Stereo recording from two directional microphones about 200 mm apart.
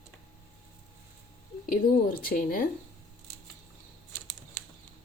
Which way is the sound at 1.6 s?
45° left (ahead or behind).